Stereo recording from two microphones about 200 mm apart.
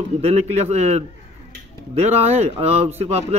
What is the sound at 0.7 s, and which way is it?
Speech, 35° right (ahead or behind).